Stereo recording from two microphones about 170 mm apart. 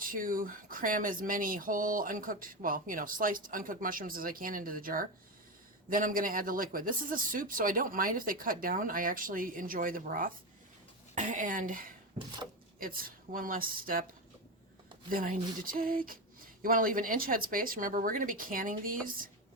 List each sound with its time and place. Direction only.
0.0 s speech: 55° right (ahead or behind)
15.1 s speech: 55° right (ahead or behind)